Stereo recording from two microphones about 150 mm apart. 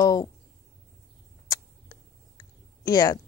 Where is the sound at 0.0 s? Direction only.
25° left (ahead or behind).